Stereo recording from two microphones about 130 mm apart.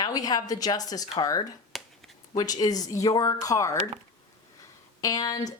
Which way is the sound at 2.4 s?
30° left (ahead or behind).